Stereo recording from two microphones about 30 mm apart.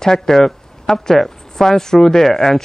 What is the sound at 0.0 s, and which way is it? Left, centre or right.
A man's voice, centre.